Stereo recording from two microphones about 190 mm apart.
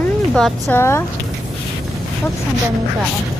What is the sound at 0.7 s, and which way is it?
Speech, 15° left (ahead or behind).